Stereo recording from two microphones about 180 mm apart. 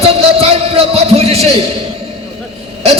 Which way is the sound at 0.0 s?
35° right (ahead or behind).